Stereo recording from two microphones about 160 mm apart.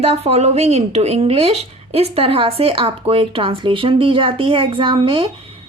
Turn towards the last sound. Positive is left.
turn(degrees=-35)  # may be behind; listen again after turning